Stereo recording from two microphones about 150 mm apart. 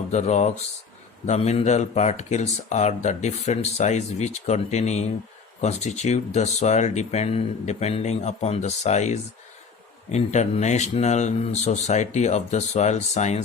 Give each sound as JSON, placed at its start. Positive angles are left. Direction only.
{"t": 0.1, "sound": "speech", "side_deg": 50}